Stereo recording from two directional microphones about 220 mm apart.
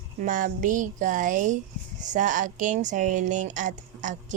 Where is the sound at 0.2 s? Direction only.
35° right (ahead or behind).